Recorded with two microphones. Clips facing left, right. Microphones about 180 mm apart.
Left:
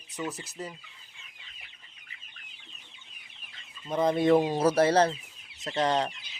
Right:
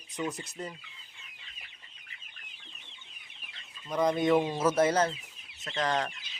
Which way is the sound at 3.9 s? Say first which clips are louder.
Left 3 dB; 25° left (ahead or behind).